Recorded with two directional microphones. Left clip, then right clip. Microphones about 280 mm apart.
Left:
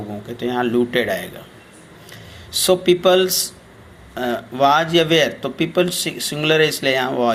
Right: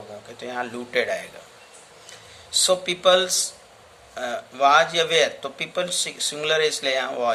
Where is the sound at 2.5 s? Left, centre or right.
Centre.